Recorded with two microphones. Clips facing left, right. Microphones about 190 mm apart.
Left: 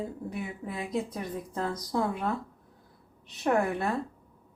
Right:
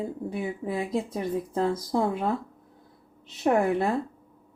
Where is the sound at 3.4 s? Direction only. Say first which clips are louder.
Right 4 dB; 25° right (ahead or behind).